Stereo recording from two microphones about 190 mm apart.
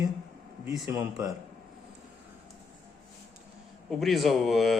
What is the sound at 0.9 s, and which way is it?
Speech, 20° right (ahead or behind).